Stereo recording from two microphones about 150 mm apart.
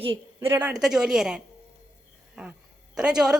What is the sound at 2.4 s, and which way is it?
Cough, 5° right (ahead or behind).